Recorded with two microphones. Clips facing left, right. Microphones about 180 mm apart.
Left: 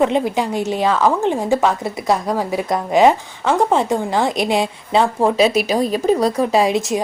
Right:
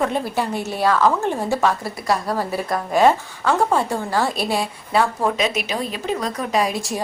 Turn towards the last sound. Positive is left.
turn(degrees=20)  # may be behind; listen again after turning